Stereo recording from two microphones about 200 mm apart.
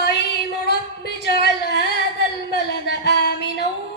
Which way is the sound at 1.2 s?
55° left (ahead or behind).